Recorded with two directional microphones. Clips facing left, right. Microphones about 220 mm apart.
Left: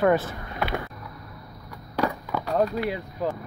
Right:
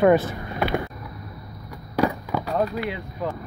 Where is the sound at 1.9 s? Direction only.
10° right (ahead or behind).